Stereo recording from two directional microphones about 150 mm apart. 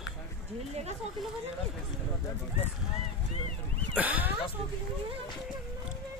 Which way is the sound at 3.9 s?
10° right (ahead or behind).